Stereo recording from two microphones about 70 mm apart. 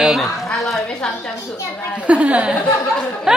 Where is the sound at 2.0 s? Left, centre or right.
Centre.